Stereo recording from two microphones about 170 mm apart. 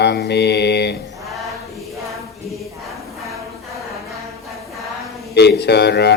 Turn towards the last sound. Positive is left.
turn(degrees=75)  # may be behind; listen again after turning